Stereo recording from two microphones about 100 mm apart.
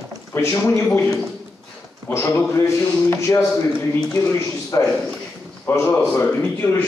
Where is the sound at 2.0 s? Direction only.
25° left (ahead or behind).